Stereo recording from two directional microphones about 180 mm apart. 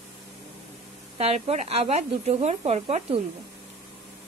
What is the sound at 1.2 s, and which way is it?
Speech, 35° right (ahead or behind).